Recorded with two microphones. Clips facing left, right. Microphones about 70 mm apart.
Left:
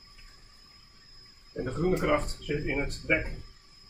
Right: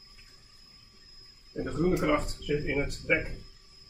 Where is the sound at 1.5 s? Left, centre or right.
Left.